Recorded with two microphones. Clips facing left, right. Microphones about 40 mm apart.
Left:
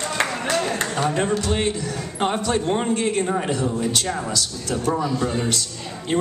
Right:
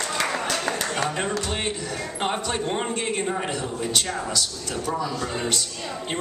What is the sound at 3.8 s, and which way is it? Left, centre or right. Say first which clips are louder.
Speech: left 2 dB; centre.